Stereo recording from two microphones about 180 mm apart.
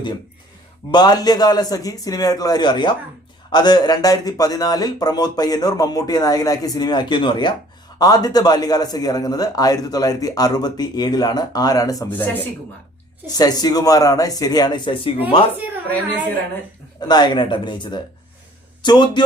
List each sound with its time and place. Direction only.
0.9 s a man's voice: 25° left (ahead or behind)
13.2 s a man's voice: 20° left (ahead or behind)
17.0 s a man's voice: 25° left (ahead or behind)